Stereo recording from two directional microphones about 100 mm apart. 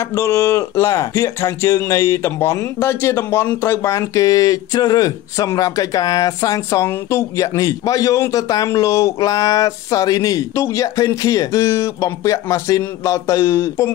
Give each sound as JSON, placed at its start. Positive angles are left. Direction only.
{"t": 0.1, "sound": "speech", "side_deg": 35}